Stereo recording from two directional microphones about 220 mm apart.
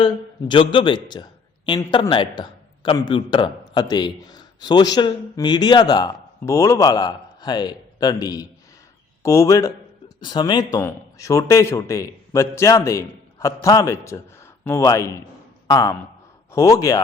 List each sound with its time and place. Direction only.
0.0 s a man's voice: 20° left (ahead or behind)